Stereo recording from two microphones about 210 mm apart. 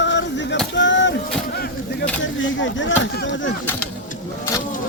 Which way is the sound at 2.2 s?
65° left (ahead or behind).